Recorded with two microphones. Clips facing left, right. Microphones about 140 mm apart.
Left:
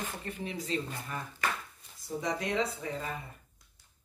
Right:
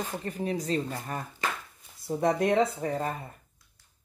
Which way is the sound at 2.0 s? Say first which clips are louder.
Right 8 dB; 55° right (ahead or behind).